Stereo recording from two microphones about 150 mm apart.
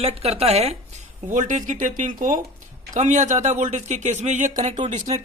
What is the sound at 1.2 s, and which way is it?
Speech, 60° right (ahead or behind).